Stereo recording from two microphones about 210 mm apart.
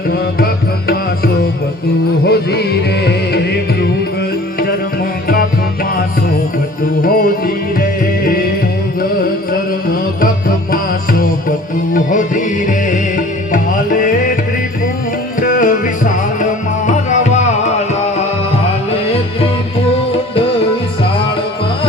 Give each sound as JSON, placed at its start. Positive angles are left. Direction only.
{"t": 0.3, "sound": "music", "side_deg": 45}
{"t": 7.0, "sound": "music", "side_deg": 45}
{"t": 9.5, "sound": "music", "side_deg": 45}
{"t": 11.9, "sound": "music", "side_deg": 40}
{"t": 15.4, "sound": "music", "side_deg": 40}